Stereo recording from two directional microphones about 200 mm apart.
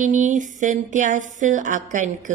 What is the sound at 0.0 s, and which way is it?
A woman's voice, 40° right (ahead or behind).